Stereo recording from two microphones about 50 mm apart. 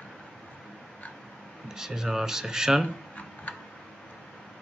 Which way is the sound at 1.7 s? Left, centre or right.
Centre.